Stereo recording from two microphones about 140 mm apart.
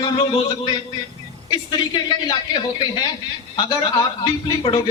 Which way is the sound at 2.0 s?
30° left (ahead or behind).